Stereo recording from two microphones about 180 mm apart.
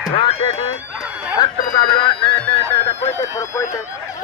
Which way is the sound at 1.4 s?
25° left (ahead or behind).